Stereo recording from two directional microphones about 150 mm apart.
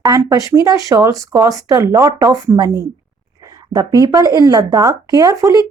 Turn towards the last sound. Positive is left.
turn(degrees=-25)  # may be behind; listen again after turning